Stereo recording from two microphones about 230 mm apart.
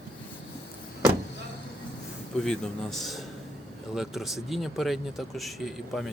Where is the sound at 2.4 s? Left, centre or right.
Centre.